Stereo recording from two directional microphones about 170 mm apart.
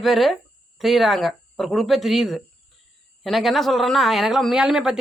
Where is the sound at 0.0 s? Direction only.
Centre (ahead or behind).